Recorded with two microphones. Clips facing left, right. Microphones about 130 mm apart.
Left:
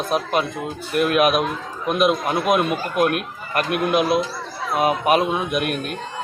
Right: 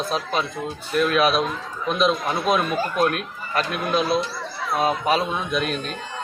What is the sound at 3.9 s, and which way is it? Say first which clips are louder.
Speech: left 2 dB; 15° left (ahead or behind).